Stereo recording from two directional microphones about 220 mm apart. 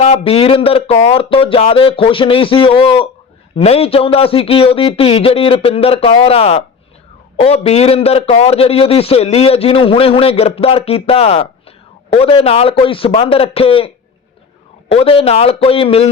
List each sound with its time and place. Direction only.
0.0 s a man's voice: 30° left (ahead or behind)